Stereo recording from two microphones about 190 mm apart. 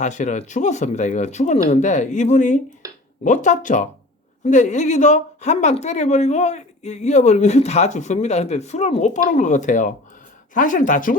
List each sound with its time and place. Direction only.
0.0 s speech: 40° left (ahead or behind)
2.8 s a sound: 20° right (ahead or behind)
3.2 s speech: 40° left (ahead or behind)